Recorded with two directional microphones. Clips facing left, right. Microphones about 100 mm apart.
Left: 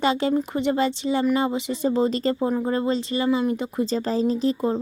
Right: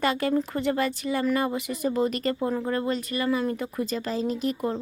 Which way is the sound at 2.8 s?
25° left (ahead or behind).